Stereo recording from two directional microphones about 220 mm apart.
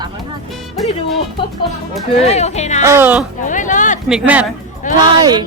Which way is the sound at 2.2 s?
30° left (ahead or behind).